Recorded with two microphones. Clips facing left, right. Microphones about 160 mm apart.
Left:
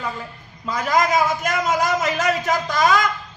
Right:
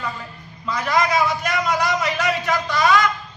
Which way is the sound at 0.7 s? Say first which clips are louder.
Left 1 dB; 45° left (ahead or behind).